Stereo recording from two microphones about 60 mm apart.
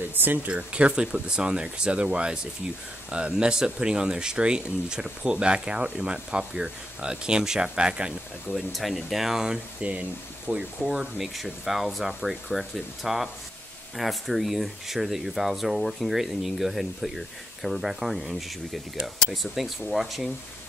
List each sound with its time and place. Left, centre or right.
0.1 s speech: right
0.5 s speech: right
8.5 s speech: centre
9.8 s speech: right
10.5 s speech: centre